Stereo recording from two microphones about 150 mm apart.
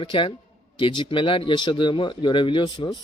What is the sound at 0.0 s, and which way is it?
A man's voice, 35° left (ahead or behind).